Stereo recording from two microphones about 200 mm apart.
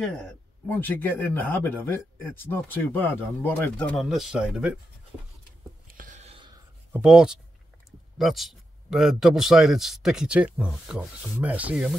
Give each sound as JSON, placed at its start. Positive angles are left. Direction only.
{"t": 0.0, "sound": "a man's voice", "side_deg": 0}
{"t": 5.9, "sound": "whispering", "side_deg": -40}
{"t": 6.9, "sound": "speech", "side_deg": -5}